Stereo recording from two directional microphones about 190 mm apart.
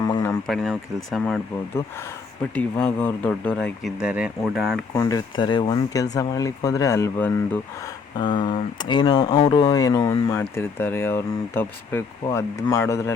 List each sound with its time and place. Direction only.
0.0 s a sound: 20° left (ahead or behind)
0.4 s speech: centre (ahead or behind)
2.6 s speech: 5° left (ahead or behind)
4.9 s speech: 20° left (ahead or behind)
8.2 s speech: 25° left (ahead or behind)